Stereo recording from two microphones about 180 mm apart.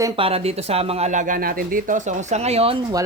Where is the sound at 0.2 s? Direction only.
35° right (ahead or behind).